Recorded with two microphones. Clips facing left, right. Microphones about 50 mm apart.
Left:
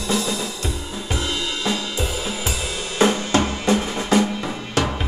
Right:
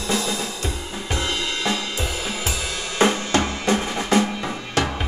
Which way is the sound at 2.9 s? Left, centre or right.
Right.